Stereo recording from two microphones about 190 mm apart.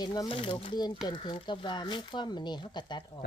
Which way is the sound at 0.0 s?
20° left (ahead or behind).